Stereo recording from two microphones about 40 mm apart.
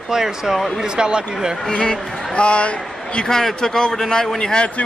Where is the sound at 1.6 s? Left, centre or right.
Centre.